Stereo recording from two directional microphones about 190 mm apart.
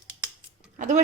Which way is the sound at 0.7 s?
40° right (ahead or behind).